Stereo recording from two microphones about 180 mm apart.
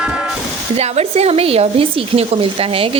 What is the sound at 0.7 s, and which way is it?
Speech, 35° right (ahead or behind).